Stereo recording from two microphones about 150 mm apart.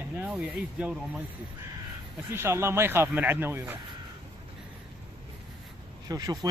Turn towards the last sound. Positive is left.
turn(degrees=-25)  # may be behind; listen again after turning